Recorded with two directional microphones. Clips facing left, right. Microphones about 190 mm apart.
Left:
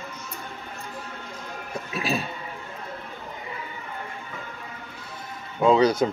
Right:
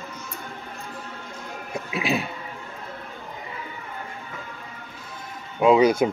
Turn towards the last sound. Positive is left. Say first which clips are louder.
# right 2 dB
turn(degrees=-10)  # may be behind; listen again after turning